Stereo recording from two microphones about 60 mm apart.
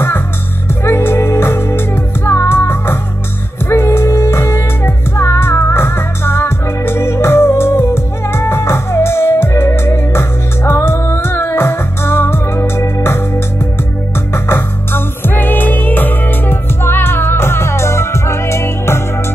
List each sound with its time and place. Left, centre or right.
0.8 s music: left
14.3 s music: left